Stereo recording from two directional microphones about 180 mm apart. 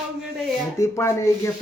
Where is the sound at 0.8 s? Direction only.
15° left (ahead or behind).